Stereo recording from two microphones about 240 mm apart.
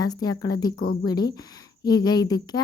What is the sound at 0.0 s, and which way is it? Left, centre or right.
A woman's voice, centre.